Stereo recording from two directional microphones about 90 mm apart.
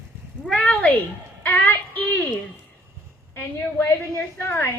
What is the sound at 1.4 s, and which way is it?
Child singing, 20° left (ahead or behind).